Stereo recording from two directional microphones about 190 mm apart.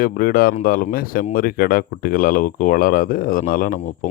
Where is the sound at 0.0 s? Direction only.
50° left (ahead or behind).